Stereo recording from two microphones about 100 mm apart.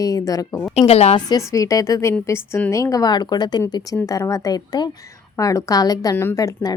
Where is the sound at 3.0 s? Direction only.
45° left (ahead or behind).